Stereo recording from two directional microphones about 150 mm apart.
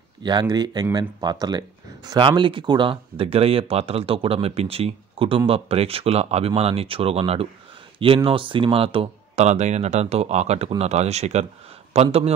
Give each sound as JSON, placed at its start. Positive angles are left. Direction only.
{"t": 0.2, "sound": "speech", "side_deg": -30}